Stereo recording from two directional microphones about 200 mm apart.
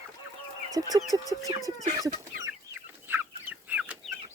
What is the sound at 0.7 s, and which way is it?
Speech, 20° right (ahead or behind).